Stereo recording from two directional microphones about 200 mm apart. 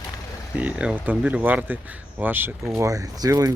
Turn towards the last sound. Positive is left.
turn(degrees=-15)  # may be behind; listen again after turning